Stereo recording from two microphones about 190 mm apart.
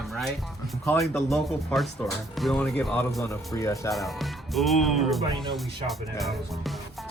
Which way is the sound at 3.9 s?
Centre (ahead or behind).